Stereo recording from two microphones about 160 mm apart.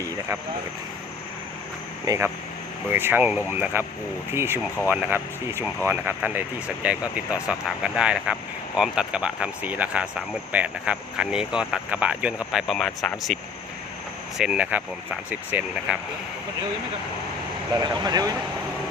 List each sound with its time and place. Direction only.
2.0 s speech: 15° right (ahead or behind)
17.7 s speech: 25° right (ahead or behind)